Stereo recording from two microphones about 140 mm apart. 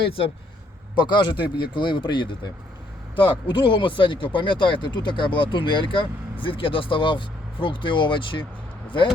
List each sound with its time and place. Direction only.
0.9 s speech: 30° left (ahead or behind)